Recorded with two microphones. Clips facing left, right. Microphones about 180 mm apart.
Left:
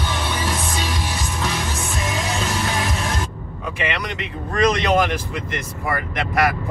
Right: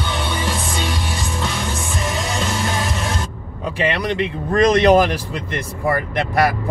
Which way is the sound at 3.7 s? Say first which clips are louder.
Right 6 dB; 30° right (ahead or behind).